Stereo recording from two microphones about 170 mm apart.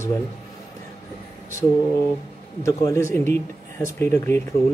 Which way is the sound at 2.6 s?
15° left (ahead or behind).